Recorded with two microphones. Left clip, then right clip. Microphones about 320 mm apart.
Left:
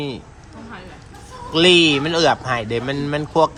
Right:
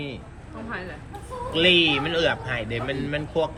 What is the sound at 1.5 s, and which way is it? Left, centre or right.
Speech, left.